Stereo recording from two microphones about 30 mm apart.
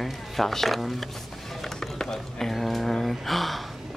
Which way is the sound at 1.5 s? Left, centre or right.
Centre.